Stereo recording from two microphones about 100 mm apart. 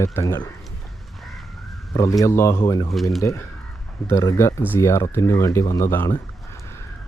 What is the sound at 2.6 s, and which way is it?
Speech, 40° left (ahead or behind).